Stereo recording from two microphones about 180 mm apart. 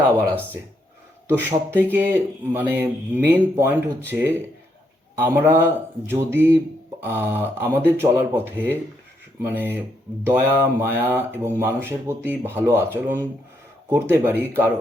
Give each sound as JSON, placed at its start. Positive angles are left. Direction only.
{"t": 0.0, "sound": "speech", "side_deg": -10}